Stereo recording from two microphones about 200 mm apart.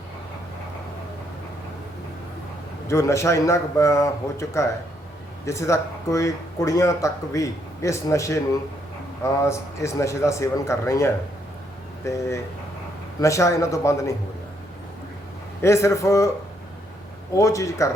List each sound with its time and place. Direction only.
2.8 s speech: 15° left (ahead or behind)
15.6 s speech: 15° left (ahead or behind)
17.3 s speech: 15° left (ahead or behind)